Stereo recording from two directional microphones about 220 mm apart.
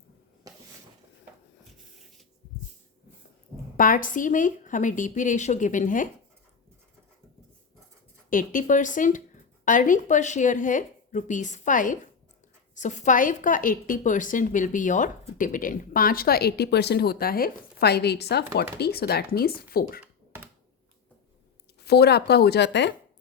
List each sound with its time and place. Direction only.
0.4 s a sound: 15° right (ahead or behind)
3.8 s a woman's voice: 40° left (ahead or behind)
8.3 s a woman's voice: 40° left (ahead or behind)
21.8 s speech: 45° left (ahead or behind)